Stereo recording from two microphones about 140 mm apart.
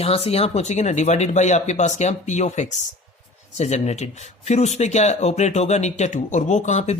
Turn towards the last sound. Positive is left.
turn(degrees=55)  # may be behind; listen again after turning